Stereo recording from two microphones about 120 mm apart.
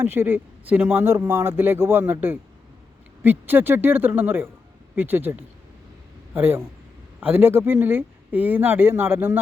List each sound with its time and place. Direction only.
0.0 s speech: 20° right (ahead or behind)